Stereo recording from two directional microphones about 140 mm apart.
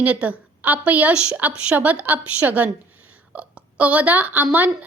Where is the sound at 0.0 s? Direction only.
10° right (ahead or behind).